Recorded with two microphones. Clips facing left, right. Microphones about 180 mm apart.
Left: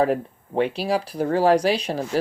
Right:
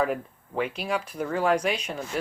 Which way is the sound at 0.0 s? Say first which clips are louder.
Left 6 dB; 30° left (ahead or behind).